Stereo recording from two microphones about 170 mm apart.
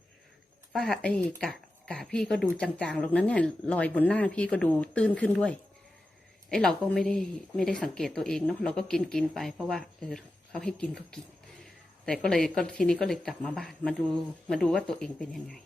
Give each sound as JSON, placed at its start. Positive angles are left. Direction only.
{"t": 0.7, "sound": "speech", "side_deg": 0}